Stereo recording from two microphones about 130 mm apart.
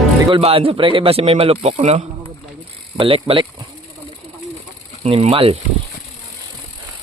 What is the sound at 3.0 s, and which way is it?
Speech, 45° right (ahead or behind).